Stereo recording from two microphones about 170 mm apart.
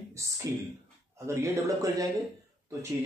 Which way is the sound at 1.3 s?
20° right (ahead or behind).